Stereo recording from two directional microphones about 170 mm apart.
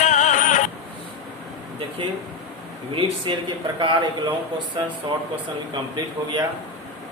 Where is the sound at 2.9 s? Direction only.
30° right (ahead or behind).